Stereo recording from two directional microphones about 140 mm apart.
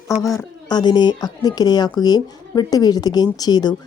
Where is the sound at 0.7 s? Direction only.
30° left (ahead or behind).